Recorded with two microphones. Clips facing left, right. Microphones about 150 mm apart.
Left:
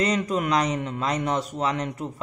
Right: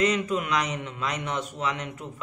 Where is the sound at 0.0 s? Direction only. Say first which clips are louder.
Left 1 dB; 35° left (ahead or behind).